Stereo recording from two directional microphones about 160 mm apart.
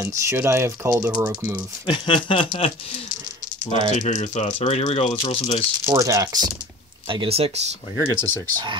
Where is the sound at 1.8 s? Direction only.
30° left (ahead or behind).